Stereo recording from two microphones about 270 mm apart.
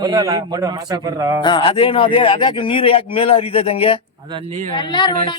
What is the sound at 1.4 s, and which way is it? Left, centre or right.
Speech, centre.